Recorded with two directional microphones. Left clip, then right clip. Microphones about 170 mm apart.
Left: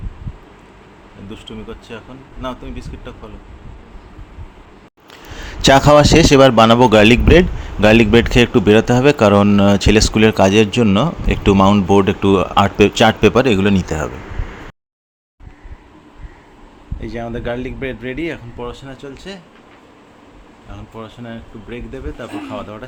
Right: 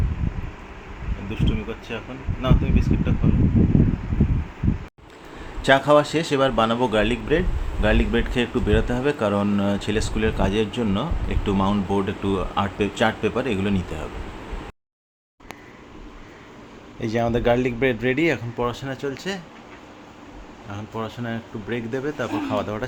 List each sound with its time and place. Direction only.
1.3 s speech: 10° left (ahead or behind)
5.6 s speech: 60° left (ahead or behind); by 14.1 s 45° left (ahead or behind)
17.0 s speech: 10° right (ahead or behind)
20.7 s speech: 10° right (ahead or behind)